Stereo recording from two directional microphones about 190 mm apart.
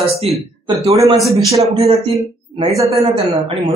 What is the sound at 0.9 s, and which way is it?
Speech, 15° right (ahead or behind).